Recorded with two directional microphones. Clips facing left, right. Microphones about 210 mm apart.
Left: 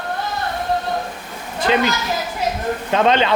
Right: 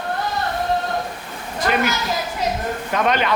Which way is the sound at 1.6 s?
30° left (ahead or behind).